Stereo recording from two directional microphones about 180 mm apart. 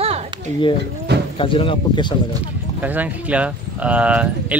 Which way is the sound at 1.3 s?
30° left (ahead or behind).